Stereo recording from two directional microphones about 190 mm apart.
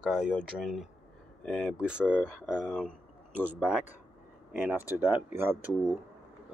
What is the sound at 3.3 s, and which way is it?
Speech, 10° right (ahead or behind).